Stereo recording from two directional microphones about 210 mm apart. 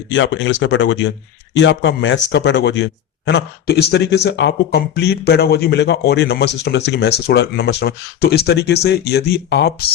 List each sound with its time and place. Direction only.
0.1 s speech: 60° left (ahead or behind)